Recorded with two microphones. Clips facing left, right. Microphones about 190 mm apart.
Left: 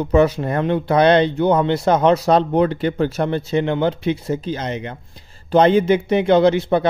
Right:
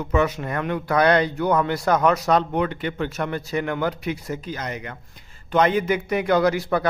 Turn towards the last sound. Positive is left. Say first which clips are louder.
# left 5 dB
turn(degrees=25)  # may be behind; listen again after turning